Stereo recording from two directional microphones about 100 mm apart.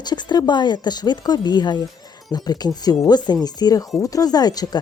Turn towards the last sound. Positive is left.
turn(degrees=40)  # may be behind; listen again after turning